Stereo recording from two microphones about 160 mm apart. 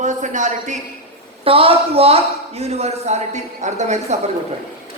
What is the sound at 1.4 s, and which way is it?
A man's voice, 35° right (ahead or behind).